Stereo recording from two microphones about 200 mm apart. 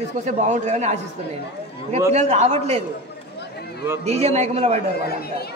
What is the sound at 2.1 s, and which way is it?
Speech, 35° right (ahead or behind).